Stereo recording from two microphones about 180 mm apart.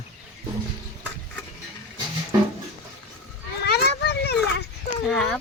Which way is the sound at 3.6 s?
65° left (ahead or behind).